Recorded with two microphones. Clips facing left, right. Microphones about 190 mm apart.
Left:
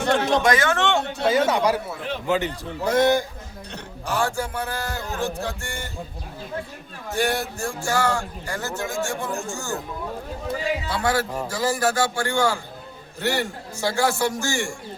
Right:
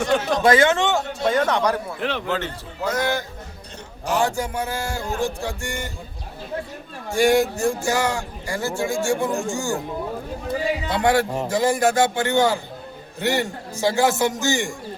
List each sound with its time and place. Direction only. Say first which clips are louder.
0.1 s a sound: left 3 dB; 65° left (ahead or behind)
0.4 s a man's voice: right 4 dB; 25° right (ahead or behind)
0.9 s a man's voice: even; centre (ahead or behind)
2.0 s a man's voice: right 4 dB; 75° right (ahead or behind)
2.2 s a man's voice: left 3 dB; 15° left (ahead or behind)
2.8 s a man's voice: left 4 dB; 30° left (ahead or behind)
4.2 s a man's voice: right 1 dB; 15° right (ahead or behind)
7.1 s a man's voice: right 7 dB; 15° right (ahead or behind)
10.8 s a man's voice: right 7 dB; 20° right (ahead or behind)